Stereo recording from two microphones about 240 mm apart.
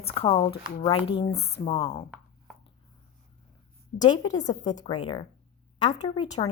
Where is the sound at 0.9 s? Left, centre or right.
Left.